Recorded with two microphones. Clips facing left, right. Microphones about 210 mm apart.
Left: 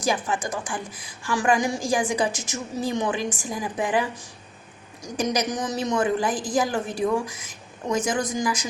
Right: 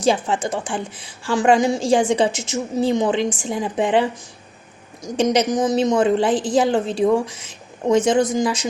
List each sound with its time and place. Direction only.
0.0 s a woman's voice: 25° right (ahead or behind)